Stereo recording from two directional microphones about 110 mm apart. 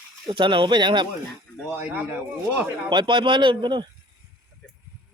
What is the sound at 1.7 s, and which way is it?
Speech, 10° right (ahead or behind).